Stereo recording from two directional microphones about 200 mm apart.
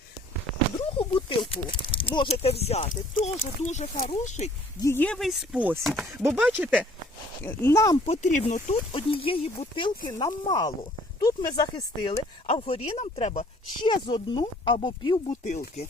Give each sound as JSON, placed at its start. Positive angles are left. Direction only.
{"t": 0.9, "sound": "speech", "side_deg": 25}
{"t": 4.8, "sound": "speech", "side_deg": 10}
{"t": 7.4, "sound": "speech", "side_deg": 15}
{"t": 8.0, "sound": "speech", "side_deg": 35}
{"t": 12.5, "sound": "speech", "side_deg": 30}
{"t": 15.3, "sound": "speech", "side_deg": 35}